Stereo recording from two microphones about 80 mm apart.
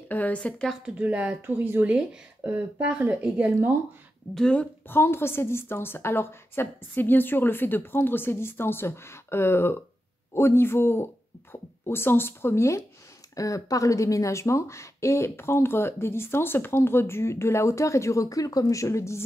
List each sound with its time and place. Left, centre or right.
0.1 s a woman's voice: centre
0.8 s speech: centre
4.3 s a woman's voice: centre
4.8 s a woman's voice: left